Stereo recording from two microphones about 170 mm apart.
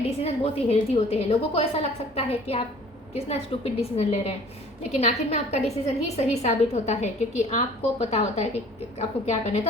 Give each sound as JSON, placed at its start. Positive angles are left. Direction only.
{"t": 0.2, "sound": "a woman's voice", "side_deg": 35}